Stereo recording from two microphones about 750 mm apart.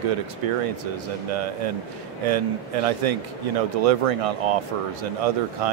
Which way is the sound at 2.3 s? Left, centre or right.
Right.